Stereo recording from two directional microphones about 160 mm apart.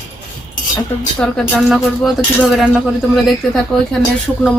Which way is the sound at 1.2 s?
5° left (ahead or behind).